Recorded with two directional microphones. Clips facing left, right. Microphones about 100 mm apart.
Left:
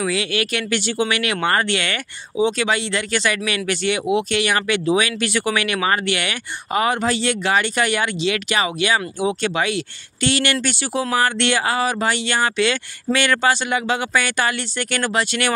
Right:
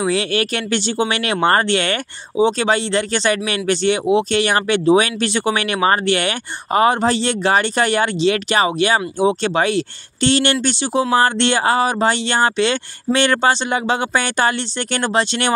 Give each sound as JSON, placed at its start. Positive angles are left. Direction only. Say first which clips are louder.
{"t": 0.0, "sound": "speech", "louder": "right 3 dB", "side_deg": -35}